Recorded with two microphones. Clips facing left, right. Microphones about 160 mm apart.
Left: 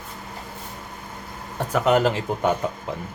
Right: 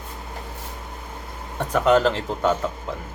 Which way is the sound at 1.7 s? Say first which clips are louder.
Right 1 dB; 10° left (ahead or behind).